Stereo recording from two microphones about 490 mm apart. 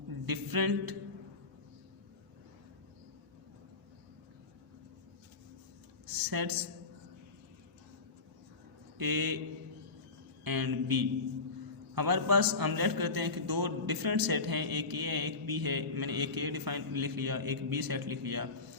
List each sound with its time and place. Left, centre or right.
0.1 s a sound: right
6.1 s a woman's voice: right
9.0 s a man's voice: right
10.4 s a man's voice: right